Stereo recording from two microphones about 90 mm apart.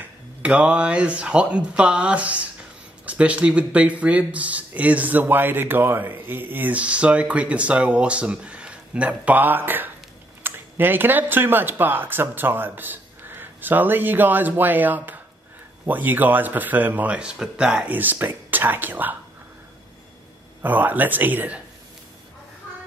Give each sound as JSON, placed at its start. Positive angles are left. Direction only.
{"t": 0.4, "sound": "speech", "side_deg": -15}
{"t": 20.6, "sound": "speech", "side_deg": -20}